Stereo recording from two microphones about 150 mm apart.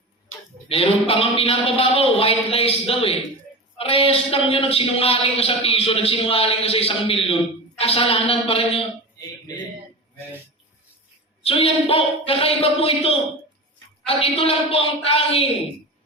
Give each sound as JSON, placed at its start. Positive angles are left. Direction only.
{"t": 0.7, "sound": "a man's voice", "side_deg": 40}
{"t": 11.4, "sound": "a man's voice", "side_deg": 40}